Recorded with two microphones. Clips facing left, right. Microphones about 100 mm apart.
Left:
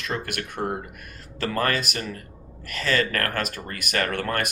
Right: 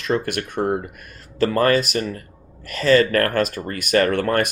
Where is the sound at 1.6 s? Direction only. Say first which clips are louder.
Right 7 dB; 30° right (ahead or behind).